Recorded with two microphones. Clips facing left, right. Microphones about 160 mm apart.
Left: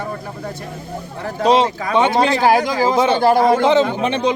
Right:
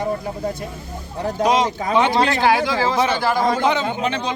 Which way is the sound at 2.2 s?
20° left (ahead or behind).